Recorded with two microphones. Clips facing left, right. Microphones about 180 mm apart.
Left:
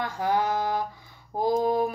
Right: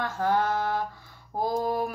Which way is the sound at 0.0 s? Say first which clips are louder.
Even; 15° left (ahead or behind).